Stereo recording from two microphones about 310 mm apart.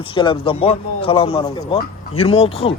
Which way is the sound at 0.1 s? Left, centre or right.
Centre.